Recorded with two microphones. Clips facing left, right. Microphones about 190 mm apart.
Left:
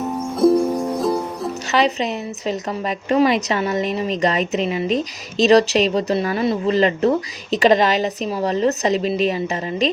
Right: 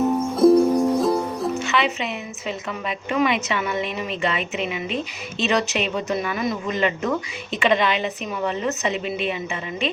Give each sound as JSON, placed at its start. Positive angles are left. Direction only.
{"t": 0.3, "sound": "music", "side_deg": 0}
{"t": 1.5, "sound": "speech", "side_deg": 40}